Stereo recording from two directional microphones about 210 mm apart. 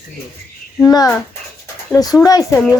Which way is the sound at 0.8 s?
15° left (ahead or behind).